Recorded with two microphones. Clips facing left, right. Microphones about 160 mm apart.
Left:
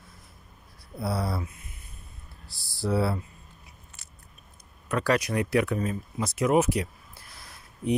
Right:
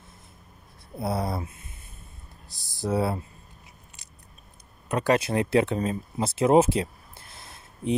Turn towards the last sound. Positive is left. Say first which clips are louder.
# even
turn(degrees=-25)  # may be behind; listen again after turning